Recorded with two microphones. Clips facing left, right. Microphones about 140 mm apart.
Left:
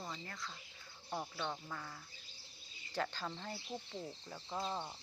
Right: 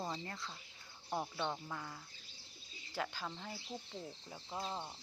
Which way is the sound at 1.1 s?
10° right (ahead or behind).